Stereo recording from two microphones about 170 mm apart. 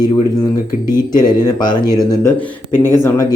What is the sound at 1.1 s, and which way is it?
Speech, 25° left (ahead or behind).